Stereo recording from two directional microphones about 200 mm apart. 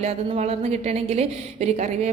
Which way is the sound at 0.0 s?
35° right (ahead or behind).